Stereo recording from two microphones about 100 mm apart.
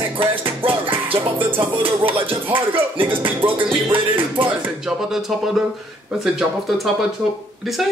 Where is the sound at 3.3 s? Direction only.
20° right (ahead or behind).